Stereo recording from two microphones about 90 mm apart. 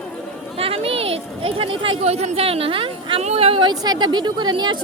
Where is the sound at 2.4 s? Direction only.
90° right.